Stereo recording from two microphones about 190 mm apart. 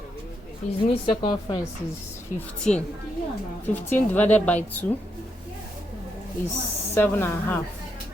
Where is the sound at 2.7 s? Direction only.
5° left (ahead or behind).